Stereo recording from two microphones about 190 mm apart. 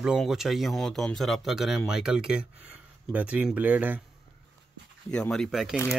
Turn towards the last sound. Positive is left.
turn(degrees=0)  # may be behind; listen again after turning